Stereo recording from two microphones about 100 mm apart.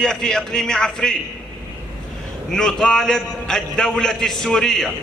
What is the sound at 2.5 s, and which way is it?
A man's voice, 5° left (ahead or behind).